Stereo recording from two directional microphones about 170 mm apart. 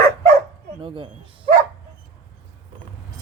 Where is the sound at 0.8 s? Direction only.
30° right (ahead or behind).